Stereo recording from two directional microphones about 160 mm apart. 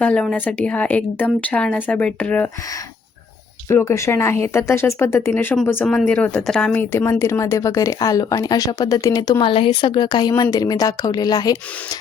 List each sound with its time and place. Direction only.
0.0 s a woman's voice: 10° left (ahead or behind)
3.7 s speech: 15° left (ahead or behind)